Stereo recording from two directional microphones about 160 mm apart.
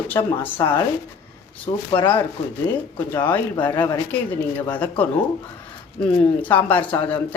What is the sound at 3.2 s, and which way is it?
Speech, 10° left (ahead or behind).